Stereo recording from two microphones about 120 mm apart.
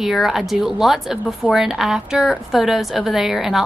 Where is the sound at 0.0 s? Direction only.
Centre (ahead or behind).